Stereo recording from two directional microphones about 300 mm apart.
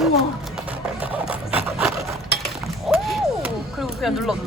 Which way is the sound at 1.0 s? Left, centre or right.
Centre.